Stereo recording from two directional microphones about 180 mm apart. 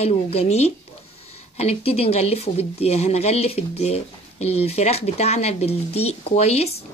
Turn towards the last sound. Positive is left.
turn(degrees=35)  # may be behind; listen again after turning